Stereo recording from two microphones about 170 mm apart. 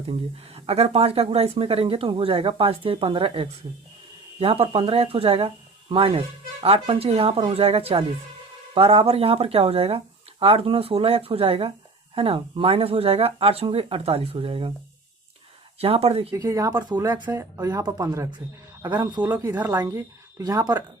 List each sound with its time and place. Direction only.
0.5 s speech: 35° right (ahead or behind)
15.8 s speech: 35° right (ahead or behind)
16.3 s speech: 20° right (ahead or behind)